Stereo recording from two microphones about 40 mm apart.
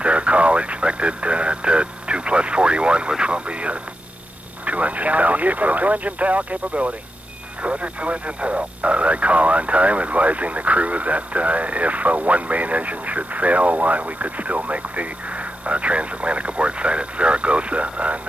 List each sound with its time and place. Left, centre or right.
0.0 s speech: right